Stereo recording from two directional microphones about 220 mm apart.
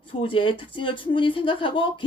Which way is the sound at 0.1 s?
25° left (ahead or behind).